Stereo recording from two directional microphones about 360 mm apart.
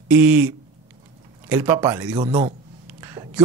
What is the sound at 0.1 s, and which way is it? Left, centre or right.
A man's voice, centre.